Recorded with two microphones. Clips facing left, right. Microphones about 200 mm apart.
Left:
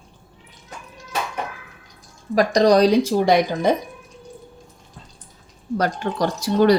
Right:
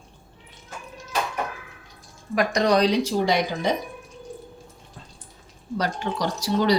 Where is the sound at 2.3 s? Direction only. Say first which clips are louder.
Left 5 dB; 35° left (ahead or behind); by 3.8 s 50° left (ahead or behind).